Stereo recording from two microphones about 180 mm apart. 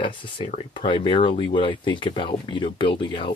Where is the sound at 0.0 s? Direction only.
25° left (ahead or behind).